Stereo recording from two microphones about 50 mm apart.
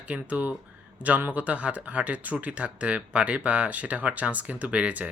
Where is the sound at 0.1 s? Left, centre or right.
Right.